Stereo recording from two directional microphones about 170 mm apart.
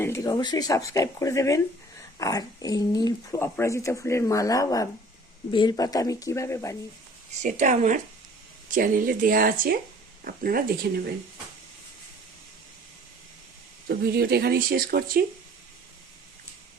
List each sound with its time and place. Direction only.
0.0 s speech: 15° left (ahead or behind)
7.4 s speech: 45° right (ahead or behind); by 11.1 s 65° right (ahead or behind)
13.8 s speech: 65° right (ahead or behind)